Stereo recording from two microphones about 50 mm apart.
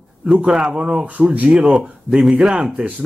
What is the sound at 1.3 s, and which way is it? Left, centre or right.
Speech, right.